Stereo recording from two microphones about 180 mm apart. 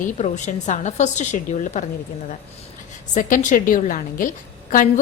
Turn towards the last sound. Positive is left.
turn(degrees=45)  # may be behind; listen again after turning